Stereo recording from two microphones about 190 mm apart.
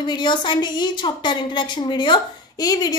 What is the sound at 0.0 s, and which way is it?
A woman's voice, 25° left (ahead or behind).